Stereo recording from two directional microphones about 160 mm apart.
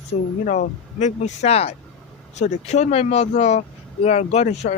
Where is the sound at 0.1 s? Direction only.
40° left (ahead or behind).